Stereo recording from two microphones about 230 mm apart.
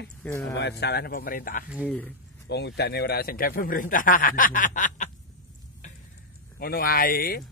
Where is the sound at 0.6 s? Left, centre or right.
Left.